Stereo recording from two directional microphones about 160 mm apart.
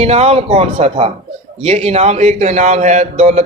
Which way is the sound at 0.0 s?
40° right (ahead or behind).